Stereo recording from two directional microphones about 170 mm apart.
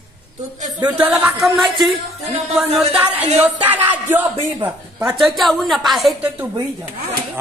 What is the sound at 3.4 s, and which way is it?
Speech, 10° right (ahead or behind).